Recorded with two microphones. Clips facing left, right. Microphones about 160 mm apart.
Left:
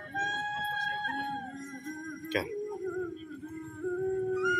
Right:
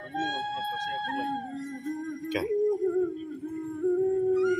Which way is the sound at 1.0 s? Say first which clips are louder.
Right 5 dB; 30° right (ahead or behind).